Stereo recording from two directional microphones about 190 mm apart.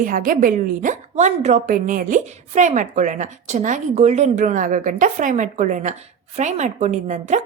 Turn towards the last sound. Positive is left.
turn(degrees=-40)  # may be behind; listen again after turning